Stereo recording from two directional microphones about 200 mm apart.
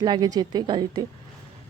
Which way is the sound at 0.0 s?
20° right (ahead or behind).